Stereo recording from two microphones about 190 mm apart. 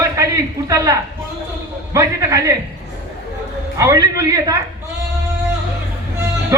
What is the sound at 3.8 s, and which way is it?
Speech, 15° right (ahead or behind).